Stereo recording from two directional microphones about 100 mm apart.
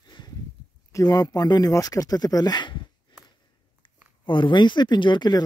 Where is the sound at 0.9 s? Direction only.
40° left (ahead or behind).